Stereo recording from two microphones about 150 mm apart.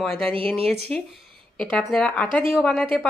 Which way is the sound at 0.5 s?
5° left (ahead or behind).